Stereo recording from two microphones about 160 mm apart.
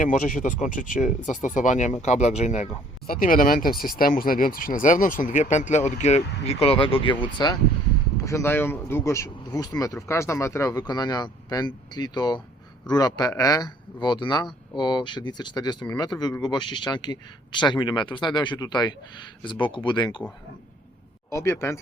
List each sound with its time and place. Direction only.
0.0 s speech: 55° left (ahead or behind); by 7.5 s 30° left (ahead or behind)
8.2 s speech: 20° left (ahead or behind)
21.2 s speech: 15° left (ahead or behind)